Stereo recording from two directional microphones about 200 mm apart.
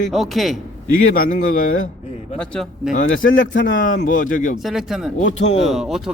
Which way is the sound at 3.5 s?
60° left (ahead or behind).